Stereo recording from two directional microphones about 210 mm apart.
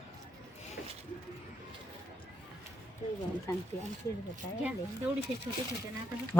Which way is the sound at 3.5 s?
15° left (ahead or behind).